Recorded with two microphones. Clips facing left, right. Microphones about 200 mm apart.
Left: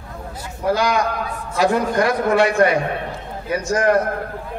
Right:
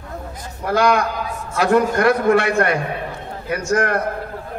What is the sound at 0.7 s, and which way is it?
A man's voice, 60° right (ahead or behind).